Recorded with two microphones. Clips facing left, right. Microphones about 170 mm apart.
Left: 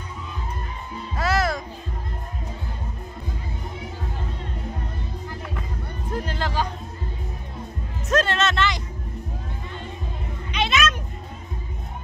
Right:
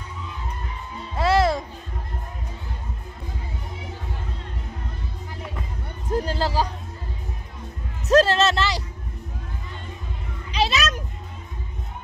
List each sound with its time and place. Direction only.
1.1 s music: 25° right (ahead or behind)
6.1 s music: 35° right (ahead or behind)
8.1 s music: 35° right (ahead or behind)
10.5 s children playing: 35° right (ahead or behind)